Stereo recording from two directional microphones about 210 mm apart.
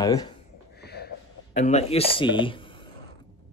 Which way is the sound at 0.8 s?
50° left (ahead or behind).